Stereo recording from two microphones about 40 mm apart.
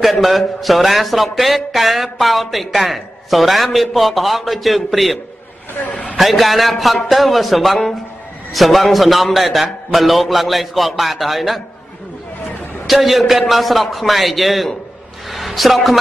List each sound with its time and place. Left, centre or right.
0.0 s a man's voice: centre
5.8 s a man's voice: left
6.1 s a man's voice: centre
12.8 s a man's voice: centre